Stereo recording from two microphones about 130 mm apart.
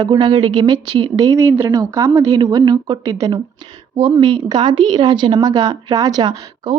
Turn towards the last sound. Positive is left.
turn(degrees=-30)  # may be behind; listen again after turning